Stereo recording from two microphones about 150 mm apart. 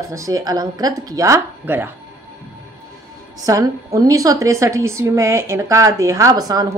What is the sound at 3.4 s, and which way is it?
A woman's voice, 20° right (ahead or behind).